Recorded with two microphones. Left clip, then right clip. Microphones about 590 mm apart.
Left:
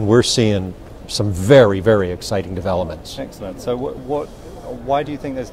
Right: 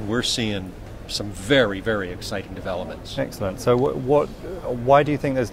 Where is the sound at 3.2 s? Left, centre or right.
Right.